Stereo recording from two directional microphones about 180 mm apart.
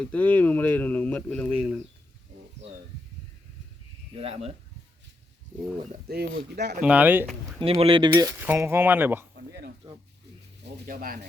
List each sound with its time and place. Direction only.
0.0 s speech: 10° left (ahead or behind)
2.6 s a sound: 40° right (ahead or behind)
4.1 s speech: 35° right (ahead or behind)
6.1 s speech: 65° right (ahead or behind)
6.8 s speech: 10° right (ahead or behind)
7.6 s speech: 30° right (ahead or behind); by 9.2 s 10° right (ahead or behind)
9.3 s a sound: 65° right (ahead or behind)
10.8 s speech: 55° right (ahead or behind)